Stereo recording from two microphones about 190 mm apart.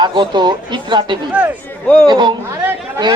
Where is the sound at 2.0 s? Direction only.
20° right (ahead or behind).